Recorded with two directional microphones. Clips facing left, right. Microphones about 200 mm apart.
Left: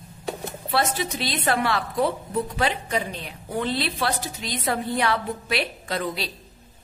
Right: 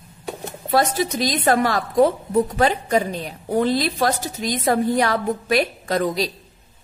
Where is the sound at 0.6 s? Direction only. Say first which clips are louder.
Right 6 dB; 40° right (ahead or behind).